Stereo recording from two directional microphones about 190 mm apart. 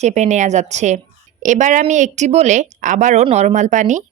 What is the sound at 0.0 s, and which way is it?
A woman's voice, 35° right (ahead or behind).